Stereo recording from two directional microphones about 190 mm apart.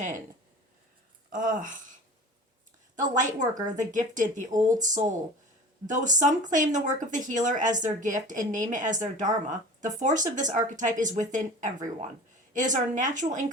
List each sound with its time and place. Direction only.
1.3 s speech: 45° right (ahead or behind)
2.9 s a woman's voice: 40° right (ahead or behind)